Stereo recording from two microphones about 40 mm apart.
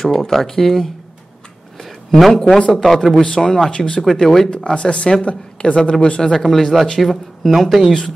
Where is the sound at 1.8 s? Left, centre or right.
Centre.